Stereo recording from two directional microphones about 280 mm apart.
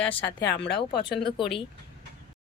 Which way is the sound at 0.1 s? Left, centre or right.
Centre.